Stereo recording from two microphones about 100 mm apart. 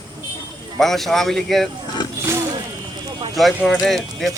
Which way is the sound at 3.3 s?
Centre (ahead or behind).